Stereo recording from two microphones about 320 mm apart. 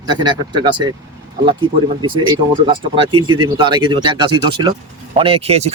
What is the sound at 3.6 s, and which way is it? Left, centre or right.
Speech, centre.